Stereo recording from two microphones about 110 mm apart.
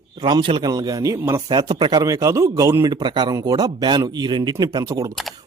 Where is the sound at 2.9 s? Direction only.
45° right (ahead or behind).